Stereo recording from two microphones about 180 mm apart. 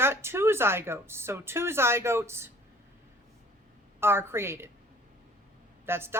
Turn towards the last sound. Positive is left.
turn(degrees=-15)  # may be behind; listen again after turning